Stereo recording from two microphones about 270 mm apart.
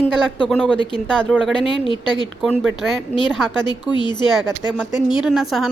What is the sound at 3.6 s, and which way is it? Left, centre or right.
A woman's voice, centre.